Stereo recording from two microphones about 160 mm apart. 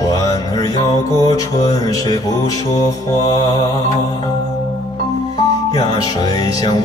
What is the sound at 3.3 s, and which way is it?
Music, 25° left (ahead or behind).